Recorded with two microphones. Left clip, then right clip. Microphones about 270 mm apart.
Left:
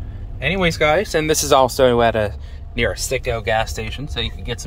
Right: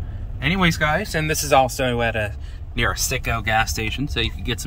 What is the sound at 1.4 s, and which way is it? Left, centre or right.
Speech, left.